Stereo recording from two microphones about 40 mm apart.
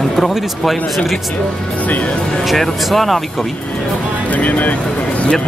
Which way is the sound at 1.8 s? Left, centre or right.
Left.